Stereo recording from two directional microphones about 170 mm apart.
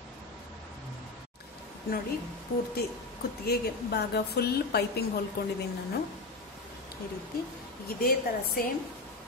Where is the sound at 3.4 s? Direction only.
70° left (ahead or behind).